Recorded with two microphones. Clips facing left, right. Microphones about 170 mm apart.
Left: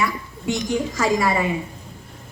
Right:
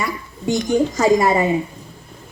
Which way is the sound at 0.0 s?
35° right (ahead or behind).